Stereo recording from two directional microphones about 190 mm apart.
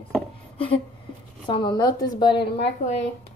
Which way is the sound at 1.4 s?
25° left (ahead or behind).